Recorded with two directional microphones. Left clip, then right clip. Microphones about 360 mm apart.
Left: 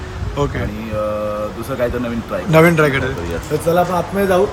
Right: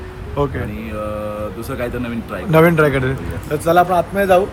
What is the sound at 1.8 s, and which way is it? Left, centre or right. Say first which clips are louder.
Speech: left 5 dB; centre.